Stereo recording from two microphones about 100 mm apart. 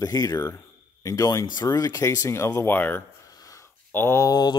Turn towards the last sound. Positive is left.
turn(degrees=45)  # may be behind; listen again after turning